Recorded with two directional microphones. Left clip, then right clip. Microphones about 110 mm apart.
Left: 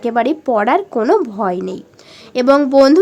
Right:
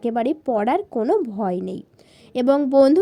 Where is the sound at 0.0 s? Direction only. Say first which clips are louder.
Left 6 dB; 40° right (ahead or behind).